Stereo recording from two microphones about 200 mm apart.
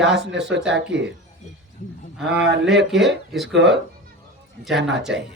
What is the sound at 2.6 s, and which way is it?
Speech, centre (ahead or behind).